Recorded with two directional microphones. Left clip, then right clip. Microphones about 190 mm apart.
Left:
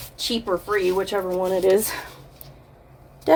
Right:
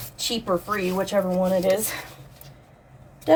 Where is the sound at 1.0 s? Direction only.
40° left (ahead or behind).